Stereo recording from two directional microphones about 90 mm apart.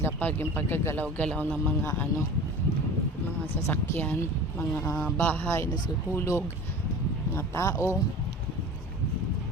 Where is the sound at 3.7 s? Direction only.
20° left (ahead or behind).